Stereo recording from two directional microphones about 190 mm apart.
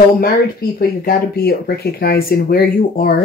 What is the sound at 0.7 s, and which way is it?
Speech, 55° left (ahead or behind).